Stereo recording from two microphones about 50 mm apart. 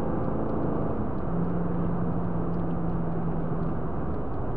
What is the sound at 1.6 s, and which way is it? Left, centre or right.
Vehicle, centre.